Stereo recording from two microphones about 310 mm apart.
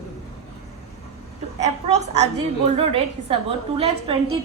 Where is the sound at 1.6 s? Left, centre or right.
Right.